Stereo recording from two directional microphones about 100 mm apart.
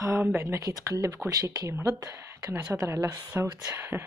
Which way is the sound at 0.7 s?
35° right (ahead or behind).